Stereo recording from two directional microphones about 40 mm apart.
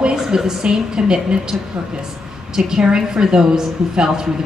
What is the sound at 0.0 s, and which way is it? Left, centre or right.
A woman's voice, centre.